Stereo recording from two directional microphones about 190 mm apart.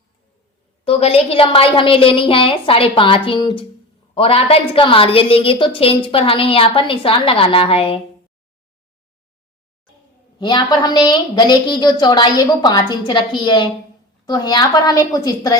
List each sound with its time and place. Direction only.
0.9 s a woman's voice: 30° left (ahead or behind)
10.3 s a woman's voice: 25° left (ahead or behind)